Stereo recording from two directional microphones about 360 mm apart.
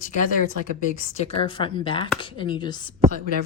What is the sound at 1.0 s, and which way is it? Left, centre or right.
Speech, centre.